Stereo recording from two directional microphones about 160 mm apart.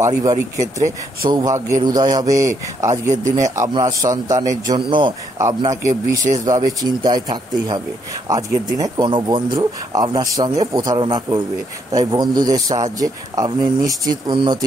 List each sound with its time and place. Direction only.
0.0 s speech: 20° right (ahead or behind)